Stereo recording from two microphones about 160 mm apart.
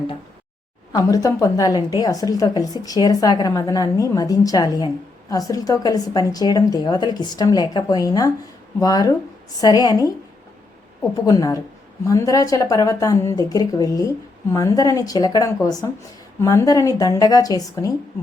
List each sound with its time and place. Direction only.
0.9 s a woman's voice: 20° left (ahead or behind)
11.3 s a woman's voice: 20° left (ahead or behind)